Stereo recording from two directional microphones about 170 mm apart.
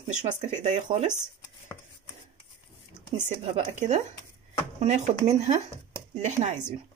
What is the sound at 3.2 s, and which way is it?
Speech, 40° right (ahead or behind).